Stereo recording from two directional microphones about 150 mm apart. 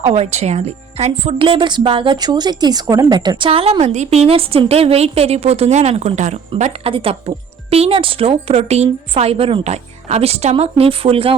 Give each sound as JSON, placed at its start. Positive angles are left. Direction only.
{"t": 0.0, "sound": "speech", "side_deg": -45}